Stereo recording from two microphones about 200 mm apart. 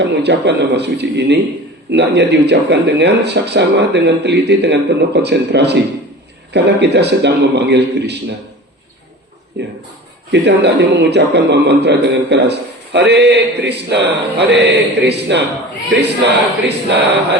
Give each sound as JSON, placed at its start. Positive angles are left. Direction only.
{"t": 0.0, "sound": "a man's voice", "side_deg": -60}
{"t": 9.6, "sound": "a man's voice", "side_deg": -60}